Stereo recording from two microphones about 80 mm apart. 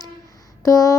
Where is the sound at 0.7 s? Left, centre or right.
Left.